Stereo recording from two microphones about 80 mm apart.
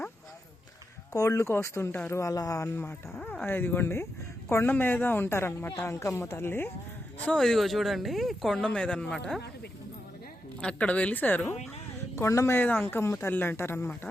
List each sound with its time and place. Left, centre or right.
1.1 s speech: left
3.4 s speech: left
7.3 s speech: centre
10.6 s a woman's voice: centre
12.1 s speech: left